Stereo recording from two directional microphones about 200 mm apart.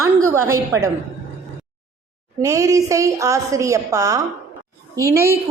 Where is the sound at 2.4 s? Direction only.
15° right (ahead or behind).